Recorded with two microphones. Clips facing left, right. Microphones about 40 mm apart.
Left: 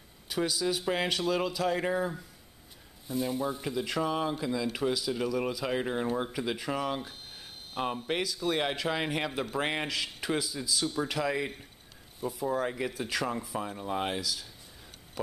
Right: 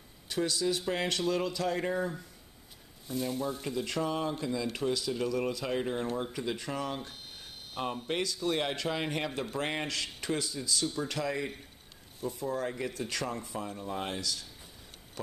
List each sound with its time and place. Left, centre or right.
0.3 s speech: centre
13.6 s speech: centre
14.2 s speech: centre